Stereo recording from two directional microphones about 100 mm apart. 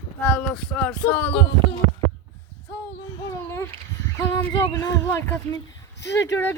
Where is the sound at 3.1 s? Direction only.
30° left (ahead or behind).